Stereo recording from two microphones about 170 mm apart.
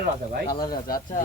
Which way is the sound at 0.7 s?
60° left (ahead or behind).